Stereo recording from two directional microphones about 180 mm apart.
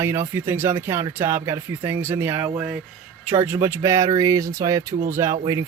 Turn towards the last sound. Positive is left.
turn(degrees=-20)  # may be behind; listen again after turning